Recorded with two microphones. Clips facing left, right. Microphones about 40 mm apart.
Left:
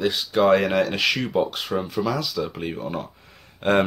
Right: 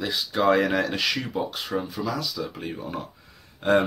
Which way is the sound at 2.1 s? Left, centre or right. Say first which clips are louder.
Left 3 dB; left.